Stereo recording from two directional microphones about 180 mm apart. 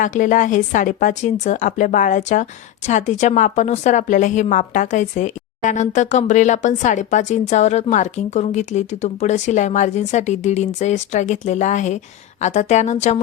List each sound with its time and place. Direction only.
0.0 s speech: 45° left (ahead or behind)